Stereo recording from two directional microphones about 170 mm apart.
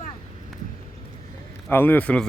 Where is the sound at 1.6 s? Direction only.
10° left (ahead or behind).